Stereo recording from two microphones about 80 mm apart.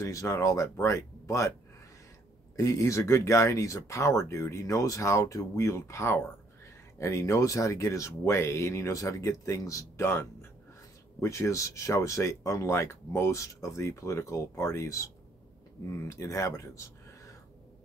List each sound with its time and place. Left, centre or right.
0.0 s speech: left
2.5 s speech: left
16.1 s speech: left